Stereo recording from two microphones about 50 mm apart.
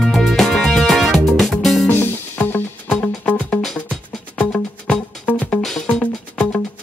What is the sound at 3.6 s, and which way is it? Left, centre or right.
Music, centre.